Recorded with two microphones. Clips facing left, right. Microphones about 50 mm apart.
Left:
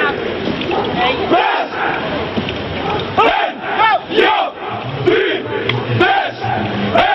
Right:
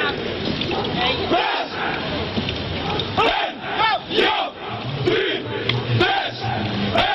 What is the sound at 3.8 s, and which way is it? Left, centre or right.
Battle cry, left.